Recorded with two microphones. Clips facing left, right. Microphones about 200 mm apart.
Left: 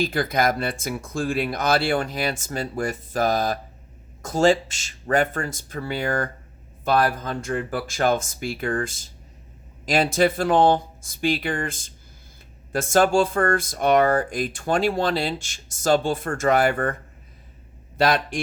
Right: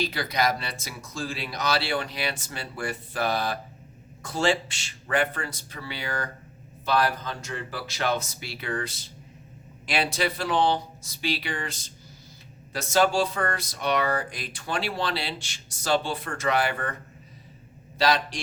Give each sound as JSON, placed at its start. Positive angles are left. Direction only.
{"t": 0.0, "sound": "speech", "side_deg": 50}
{"t": 17.9, "sound": "a man's voice", "side_deg": 55}